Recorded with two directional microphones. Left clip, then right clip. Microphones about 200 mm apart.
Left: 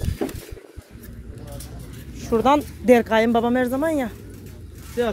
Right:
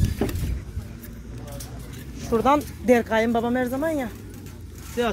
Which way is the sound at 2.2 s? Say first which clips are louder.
Left 2 dB; 30° left (ahead or behind).